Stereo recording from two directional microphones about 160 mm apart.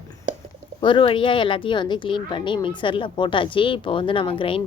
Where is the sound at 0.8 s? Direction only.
30° left (ahead or behind).